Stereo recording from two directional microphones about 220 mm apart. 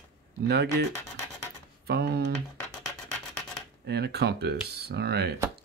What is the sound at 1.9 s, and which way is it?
Speech, 45° right (ahead or behind).